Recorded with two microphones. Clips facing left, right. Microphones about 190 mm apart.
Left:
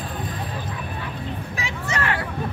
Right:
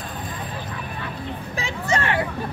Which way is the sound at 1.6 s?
30° right (ahead or behind).